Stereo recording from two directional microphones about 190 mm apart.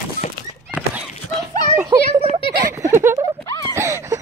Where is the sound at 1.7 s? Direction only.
15° right (ahead or behind).